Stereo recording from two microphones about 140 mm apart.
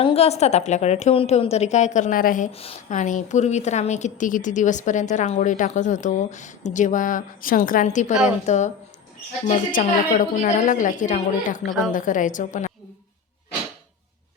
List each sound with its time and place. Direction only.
0.0 s a woman's voice: 45° left (ahead or behind); by 2.5 s 75° left (ahead or behind)
2.5 s speech: 45° left (ahead or behind)
2.9 s a woman's voice: 65° left (ahead or behind); by 7.9 s 85° left
7.9 s a woman's voice: 55° left (ahead or behind)